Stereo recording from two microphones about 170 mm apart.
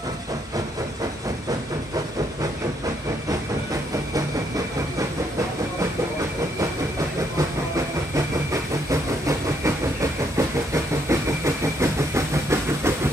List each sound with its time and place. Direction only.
10.3 s vehicle: 15° right (ahead or behind)